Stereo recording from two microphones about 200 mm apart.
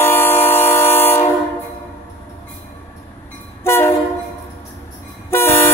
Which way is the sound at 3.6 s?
10° left (ahead or behind).